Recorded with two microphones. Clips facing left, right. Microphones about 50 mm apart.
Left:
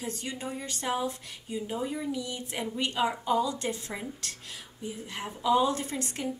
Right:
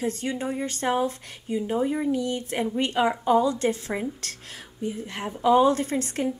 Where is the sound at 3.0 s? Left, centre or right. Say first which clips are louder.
Right 6 dB; right.